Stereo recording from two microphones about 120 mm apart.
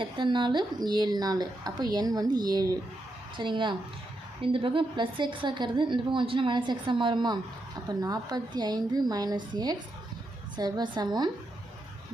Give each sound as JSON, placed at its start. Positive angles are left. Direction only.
{"t": 0.0, "sound": "a woman's voice", "side_deg": -40}